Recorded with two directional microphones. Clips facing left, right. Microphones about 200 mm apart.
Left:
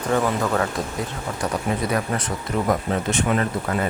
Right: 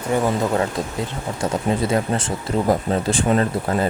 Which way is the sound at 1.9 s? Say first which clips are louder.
Right 3 dB; 30° right (ahead or behind).